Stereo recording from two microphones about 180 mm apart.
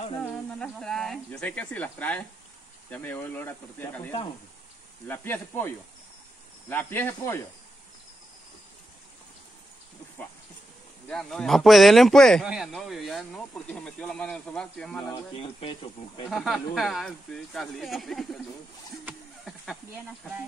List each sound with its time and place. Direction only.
0.2 s speech: 5° left (ahead or behind)
6.7 s speech: 10° left (ahead or behind)
11.1 s speech: centre (ahead or behind)
15.6 s speech: 30° left (ahead or behind)
16.3 s speech: centre (ahead or behind)
19.0 s a sound: centre (ahead or behind)